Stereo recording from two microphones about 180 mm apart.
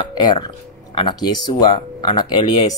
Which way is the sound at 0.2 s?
25° left (ahead or behind).